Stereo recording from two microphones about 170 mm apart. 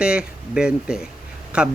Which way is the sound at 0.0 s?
5° right (ahead or behind).